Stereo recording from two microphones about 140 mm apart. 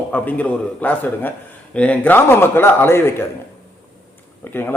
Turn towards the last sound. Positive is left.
turn(degrees=15)  # may be behind; listen again after turning